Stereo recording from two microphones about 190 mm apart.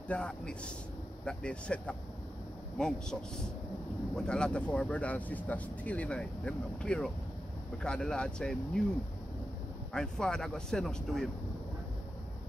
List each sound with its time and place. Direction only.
0.1 s speech: 5° left (ahead or behind)
9.9 s speech: 5° left (ahead or behind)